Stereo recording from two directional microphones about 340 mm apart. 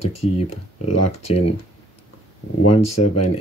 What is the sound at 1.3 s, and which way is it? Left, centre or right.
Speech, centre.